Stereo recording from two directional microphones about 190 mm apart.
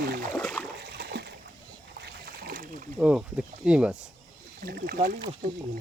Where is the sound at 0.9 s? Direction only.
60° right (ahead or behind).